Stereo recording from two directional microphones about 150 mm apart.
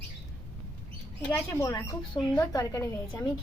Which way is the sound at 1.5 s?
15° left (ahead or behind).